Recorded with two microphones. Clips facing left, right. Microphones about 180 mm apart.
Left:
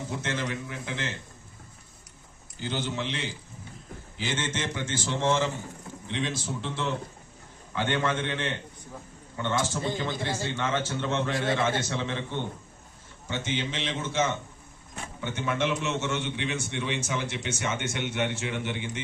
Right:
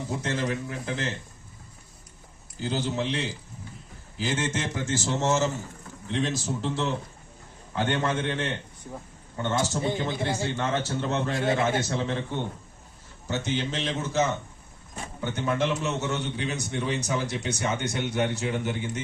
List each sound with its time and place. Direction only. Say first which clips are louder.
0.2 s a man's voice: right 4 dB; 40° right (ahead or behind)
2.6 s a man's voice: right 3 dB; 40° right (ahead or behind)
9.6 s a man's voice: right 3 dB; 20° right (ahead or behind)
10.6 s a man's voice: right 1 dB; 35° right (ahead or behind)
11.3 s a man's voice: right 2 dB; 25° right (ahead or behind)
11.9 s a man's voice: right 3 dB; 40° right (ahead or behind)
13.2 s a man's voice: right 3 dB; 40° right (ahead or behind)